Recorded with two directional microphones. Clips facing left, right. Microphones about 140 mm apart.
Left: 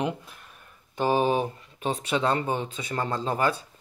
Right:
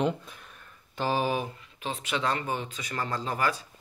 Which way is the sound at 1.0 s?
20° left (ahead or behind).